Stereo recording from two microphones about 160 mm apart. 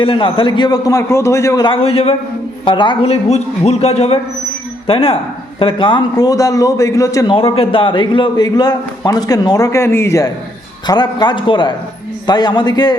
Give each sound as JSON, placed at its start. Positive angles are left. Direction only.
{"t": 0.0, "sound": "a man's voice", "side_deg": 35}
{"t": 7.3, "sound": "a man's voice", "side_deg": 35}